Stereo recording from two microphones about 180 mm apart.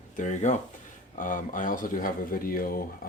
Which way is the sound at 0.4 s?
40° left (ahead or behind).